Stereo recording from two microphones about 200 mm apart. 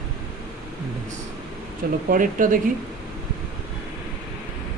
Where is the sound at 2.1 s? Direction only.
40° right (ahead or behind).